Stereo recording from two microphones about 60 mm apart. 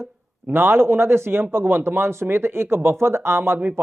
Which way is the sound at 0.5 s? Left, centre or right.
Right.